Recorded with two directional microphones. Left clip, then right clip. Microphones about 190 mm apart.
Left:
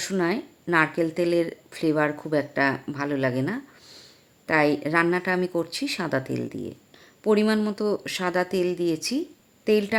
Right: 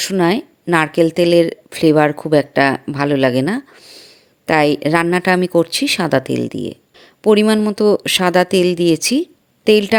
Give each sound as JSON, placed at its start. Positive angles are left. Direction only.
{"t": 0.0, "sound": "speech", "side_deg": -40}